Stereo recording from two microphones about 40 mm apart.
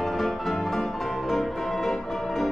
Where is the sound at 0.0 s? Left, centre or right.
Centre.